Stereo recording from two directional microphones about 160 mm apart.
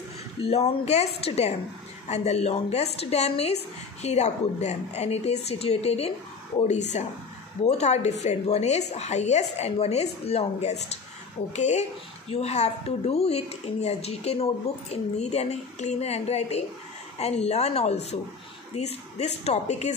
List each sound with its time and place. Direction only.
0.4 s speech: 40° left (ahead or behind)
7.6 s a woman's voice: 45° left (ahead or behind)